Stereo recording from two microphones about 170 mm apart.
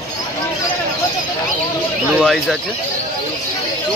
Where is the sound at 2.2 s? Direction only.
Centre (ahead or behind).